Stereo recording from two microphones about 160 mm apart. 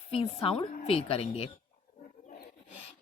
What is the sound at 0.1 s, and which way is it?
Speech, 35° left (ahead or behind).